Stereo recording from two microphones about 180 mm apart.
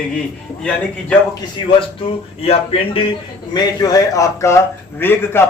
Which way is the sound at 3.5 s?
20° left (ahead or behind).